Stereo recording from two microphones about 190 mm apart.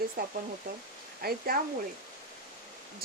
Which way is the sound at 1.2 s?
50° right (ahead or behind).